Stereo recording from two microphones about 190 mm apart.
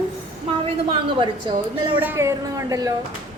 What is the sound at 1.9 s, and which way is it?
Speech, 10° right (ahead or behind).